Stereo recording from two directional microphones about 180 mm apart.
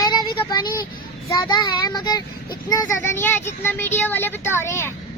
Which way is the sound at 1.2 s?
20° left (ahead or behind).